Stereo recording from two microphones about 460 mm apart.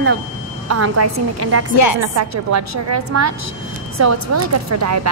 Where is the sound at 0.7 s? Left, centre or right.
Right.